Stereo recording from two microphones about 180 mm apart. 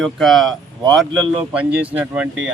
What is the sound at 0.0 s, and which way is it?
Speech, centre (ahead or behind).